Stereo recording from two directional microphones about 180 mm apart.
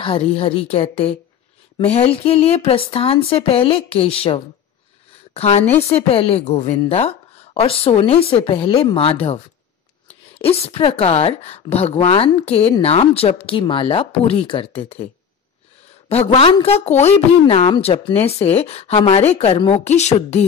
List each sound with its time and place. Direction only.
0.0 s a woman's voice: 30° left (ahead or behind)
16.1 s a woman's voice: 35° left (ahead or behind)